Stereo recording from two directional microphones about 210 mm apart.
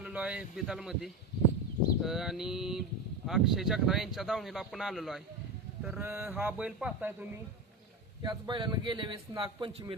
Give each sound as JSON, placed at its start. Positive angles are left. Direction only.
{"t": 0.0, "sound": "a man's voice", "side_deg": -5}
{"t": 8.2, "sound": "a man's voice", "side_deg": -20}